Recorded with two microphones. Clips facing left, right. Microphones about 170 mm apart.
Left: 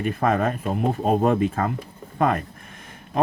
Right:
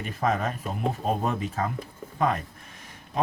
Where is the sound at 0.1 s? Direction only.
55° left (ahead or behind).